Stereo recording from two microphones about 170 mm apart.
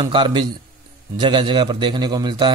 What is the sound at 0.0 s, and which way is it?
Speech, 25° right (ahead or behind).